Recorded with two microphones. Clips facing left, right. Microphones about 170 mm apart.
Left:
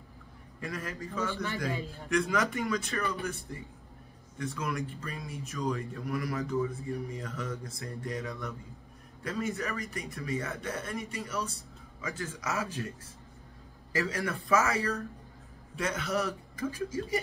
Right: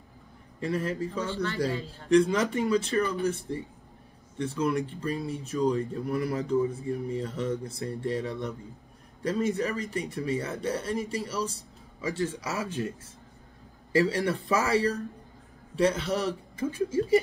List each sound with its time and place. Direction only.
0.6 s speech: 30° right (ahead or behind)
1.3 s a man's voice: 15° left (ahead or behind)
2.0 s speech: 30° right (ahead or behind)
6.3 s a man's voice: 25° right (ahead or behind)
13.9 s a man's voice: 35° right (ahead or behind)